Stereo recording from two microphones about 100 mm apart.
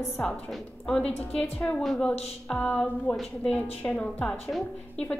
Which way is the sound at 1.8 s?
Centre (ahead or behind).